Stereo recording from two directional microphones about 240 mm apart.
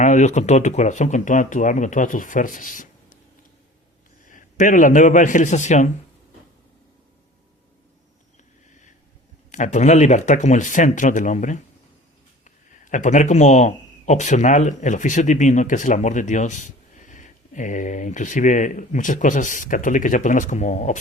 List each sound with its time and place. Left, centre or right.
0.0 s speech: left
4.3 s a man's voice: left
9.5 s speech: left